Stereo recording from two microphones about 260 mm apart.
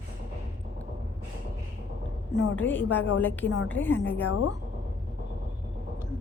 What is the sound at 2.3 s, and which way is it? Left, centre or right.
Speech, left.